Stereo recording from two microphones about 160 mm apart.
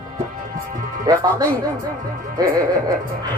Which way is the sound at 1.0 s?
25° right (ahead or behind).